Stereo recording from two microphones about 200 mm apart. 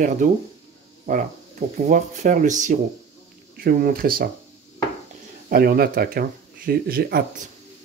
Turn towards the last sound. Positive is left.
turn(degrees=-50)  # may be behind; listen again after turning